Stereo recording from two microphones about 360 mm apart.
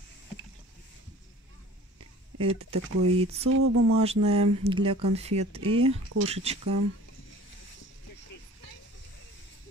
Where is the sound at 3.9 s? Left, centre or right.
Centre.